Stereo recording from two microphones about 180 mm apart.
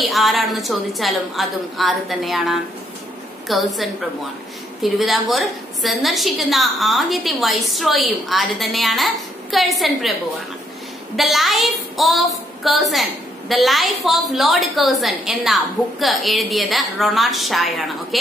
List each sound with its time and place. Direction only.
0.0 s a woman's voice: centre (ahead or behind)
11.1 s a woman's voice: centre (ahead or behind)